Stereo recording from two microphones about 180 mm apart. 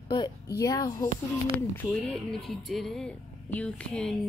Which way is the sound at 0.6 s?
20° left (ahead or behind).